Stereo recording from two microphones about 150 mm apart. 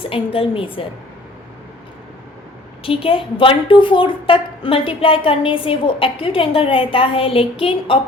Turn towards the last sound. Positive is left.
turn(degrees=40)  # may be behind; listen again after turning